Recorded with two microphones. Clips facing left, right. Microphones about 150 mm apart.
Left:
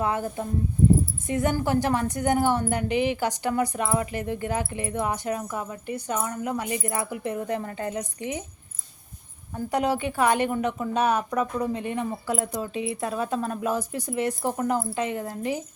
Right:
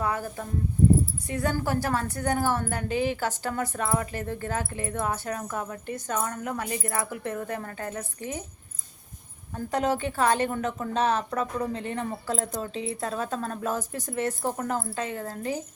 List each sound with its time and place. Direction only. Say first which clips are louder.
0.0 s a woman's voice: left 3 dB; 25° left (ahead or behind)
9.6 s a woman's voice: left 1 dB; 10° left (ahead or behind)